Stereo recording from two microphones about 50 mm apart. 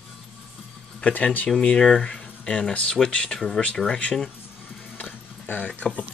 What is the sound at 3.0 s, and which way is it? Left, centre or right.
Speech, centre.